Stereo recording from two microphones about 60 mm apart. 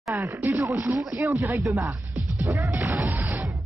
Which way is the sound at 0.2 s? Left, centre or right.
Right.